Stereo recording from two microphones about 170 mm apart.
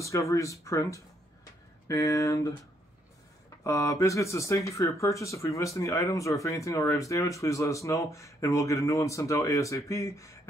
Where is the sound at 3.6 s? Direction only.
20° left (ahead or behind).